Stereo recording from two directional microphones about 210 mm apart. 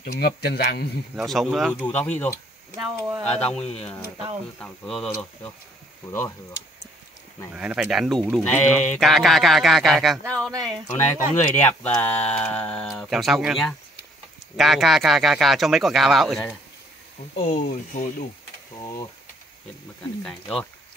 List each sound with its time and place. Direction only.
0.0 s speech: 50° left (ahead or behind)
1.1 s speech: centre (ahead or behind)
3.0 s speech: 15° right (ahead or behind)
3.3 s speech: 5° left (ahead or behind)
6.0 s speech: 10° left (ahead or behind)
7.5 s speech: 5° right (ahead or behind)
17.5 s speech: 35° left (ahead or behind)
20.2 s speech: centre (ahead or behind)